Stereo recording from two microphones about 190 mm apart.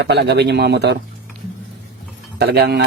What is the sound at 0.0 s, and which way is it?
Speech, 60° right (ahead or behind).